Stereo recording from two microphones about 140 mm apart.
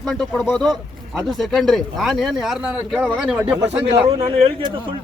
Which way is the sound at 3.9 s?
35° right (ahead or behind).